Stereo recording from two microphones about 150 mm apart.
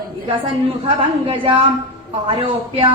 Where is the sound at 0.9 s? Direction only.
35° right (ahead or behind).